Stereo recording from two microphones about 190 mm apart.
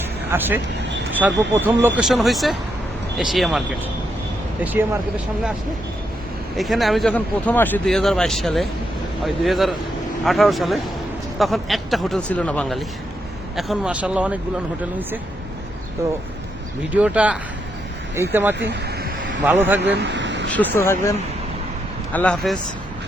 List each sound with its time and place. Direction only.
0.3 s speech: 10° right (ahead or behind)
4.6 s speech: 10° right (ahead or behind)
6.6 s speech: centre (ahead or behind)
16.9 s speech: 5° right (ahead or behind)
18.7 s vehicle: 60° right (ahead or behind)
19.5 s speech: 10° right (ahead or behind)
20.0 s a sound: 70° right (ahead or behind)
20.5 s speech: 10° left (ahead or behind)
22.1 s speech: 5° left (ahead or behind)